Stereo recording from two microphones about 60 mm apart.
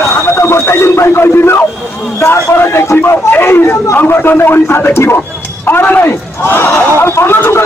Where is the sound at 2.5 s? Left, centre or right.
Left.